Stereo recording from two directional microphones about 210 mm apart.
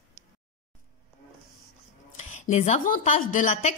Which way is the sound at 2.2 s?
35° left (ahead or behind).